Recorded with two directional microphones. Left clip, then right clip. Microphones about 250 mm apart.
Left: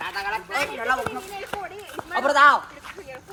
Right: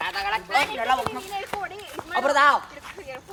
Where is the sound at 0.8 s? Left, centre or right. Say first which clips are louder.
Right 1 dB; right.